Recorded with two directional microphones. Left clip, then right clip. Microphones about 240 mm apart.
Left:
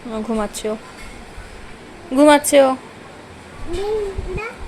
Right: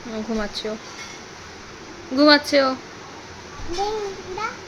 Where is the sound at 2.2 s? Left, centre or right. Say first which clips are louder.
Left 4 dB; centre.